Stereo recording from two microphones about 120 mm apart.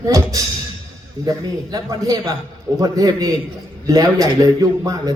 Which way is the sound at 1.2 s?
30° right (ahead or behind).